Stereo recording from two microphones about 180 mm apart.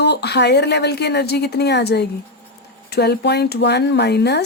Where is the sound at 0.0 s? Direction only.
65° left (ahead or behind).